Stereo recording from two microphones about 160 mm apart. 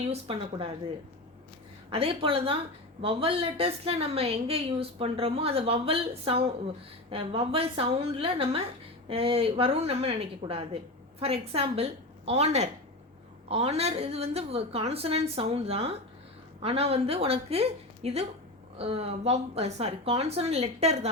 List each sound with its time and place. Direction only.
0.0 s a woman's voice: 35° right (ahead or behind)
1.9 s a woman's voice: 35° right (ahead or behind)